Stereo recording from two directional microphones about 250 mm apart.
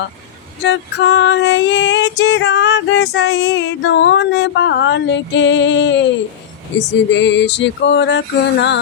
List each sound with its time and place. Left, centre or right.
0.6 s female singing: left